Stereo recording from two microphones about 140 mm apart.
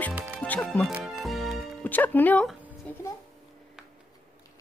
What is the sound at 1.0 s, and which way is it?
Music, centre (ahead or behind).